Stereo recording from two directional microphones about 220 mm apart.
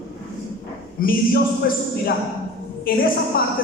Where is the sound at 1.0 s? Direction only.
40° left (ahead or behind).